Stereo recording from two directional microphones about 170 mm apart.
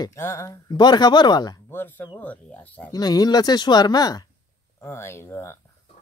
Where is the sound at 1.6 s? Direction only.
10° left (ahead or behind).